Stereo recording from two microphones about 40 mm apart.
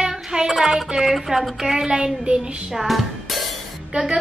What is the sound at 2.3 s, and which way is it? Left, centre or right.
Child singing, right.